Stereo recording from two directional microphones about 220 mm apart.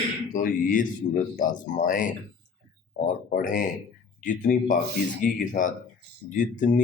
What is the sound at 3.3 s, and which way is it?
Speech, 40° left (ahead or behind).